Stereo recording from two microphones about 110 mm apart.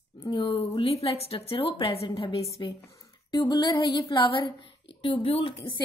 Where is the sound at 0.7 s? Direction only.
60° left (ahead or behind).